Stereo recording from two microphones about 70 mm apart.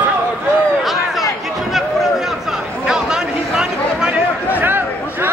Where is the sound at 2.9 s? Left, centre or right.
Centre.